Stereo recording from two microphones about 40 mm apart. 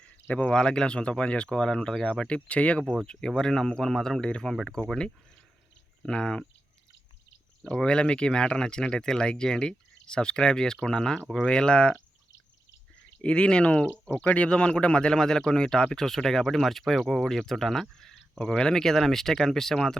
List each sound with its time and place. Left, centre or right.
0.3 s speech: left
0.5 s speech: centre
3.1 s speech: left
4.2 s speech: left
4.4 s speech: centre
6.0 s speech: centre
7.6 s speech: centre
13.0 s speech: left
14.5 s speech: left
15.9 s speech: centre